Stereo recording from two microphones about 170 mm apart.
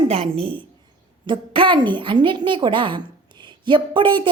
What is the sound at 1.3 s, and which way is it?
A woman's voice, 30° right (ahead or behind).